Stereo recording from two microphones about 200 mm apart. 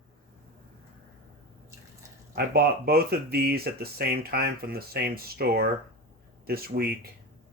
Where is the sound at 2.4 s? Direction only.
50° right (ahead or behind).